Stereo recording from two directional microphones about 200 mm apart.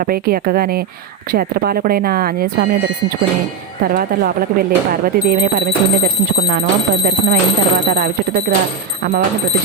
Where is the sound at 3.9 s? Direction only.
45° right (ahead or behind).